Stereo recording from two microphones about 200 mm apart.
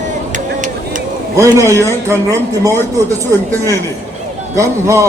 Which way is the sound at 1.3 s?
15° right (ahead or behind).